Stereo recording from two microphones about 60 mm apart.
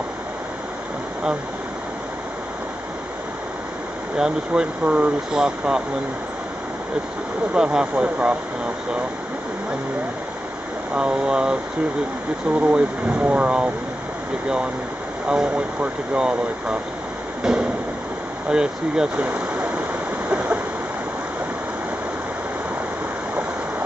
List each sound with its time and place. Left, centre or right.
4.2 s speech: centre
5.3 s speech: centre
7.5 s speech: centre
11.0 s speech: centre
12.5 s speech: right
15.2 s speech: centre
17.4 s a sound: centre
18.5 s speech: centre
19.1 s waterfall: right